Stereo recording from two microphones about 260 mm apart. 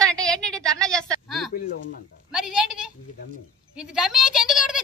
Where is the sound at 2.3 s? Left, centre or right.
Centre.